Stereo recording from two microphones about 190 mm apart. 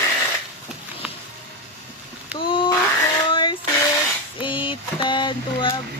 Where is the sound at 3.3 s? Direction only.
25° left (ahead or behind).